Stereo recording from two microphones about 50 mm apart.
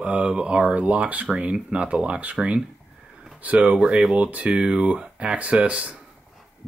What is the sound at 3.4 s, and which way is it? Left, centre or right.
Speech, right.